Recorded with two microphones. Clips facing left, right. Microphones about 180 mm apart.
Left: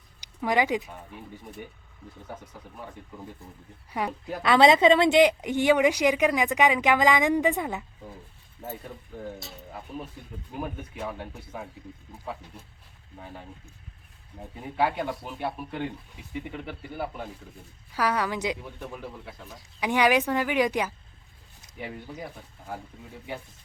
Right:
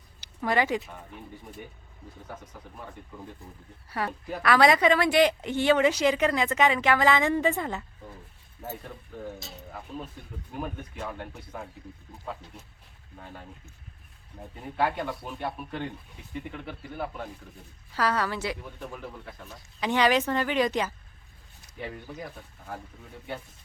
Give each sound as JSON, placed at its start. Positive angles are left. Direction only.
{"t": 0.2, "sound": "speech", "side_deg": 15}
{"t": 2.3, "sound": "speech", "side_deg": 10}
{"t": 10.5, "sound": "speech", "side_deg": 10}
{"t": 13.1, "sound": "speech", "side_deg": 10}
{"t": 14.5, "sound": "speech", "side_deg": 10}
{"t": 18.6, "sound": "speech", "side_deg": 5}